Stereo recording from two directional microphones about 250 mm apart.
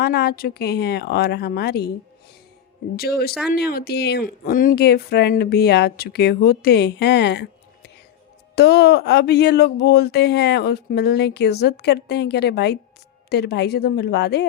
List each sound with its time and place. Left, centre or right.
0.0 s speech: left
2.9 s speech: left